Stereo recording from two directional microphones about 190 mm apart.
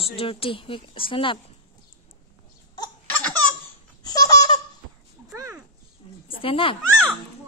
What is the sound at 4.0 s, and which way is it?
Baby laughter, 20° left (ahead or behind).